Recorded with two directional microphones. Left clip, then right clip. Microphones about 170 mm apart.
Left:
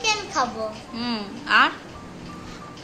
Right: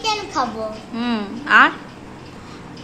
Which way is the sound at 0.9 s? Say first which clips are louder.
Right 7 dB; 10° right (ahead or behind).